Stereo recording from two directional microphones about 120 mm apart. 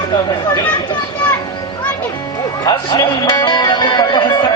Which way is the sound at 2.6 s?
35° left (ahead or behind).